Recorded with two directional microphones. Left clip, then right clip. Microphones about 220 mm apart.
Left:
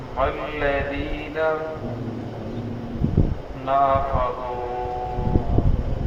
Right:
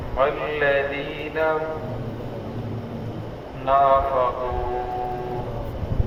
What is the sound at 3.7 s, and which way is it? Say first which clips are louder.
Speech: right 2 dB; 45° right (ahead or behind).